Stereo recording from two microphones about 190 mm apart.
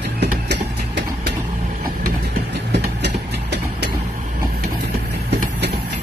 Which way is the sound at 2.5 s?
65° right (ahead or behind).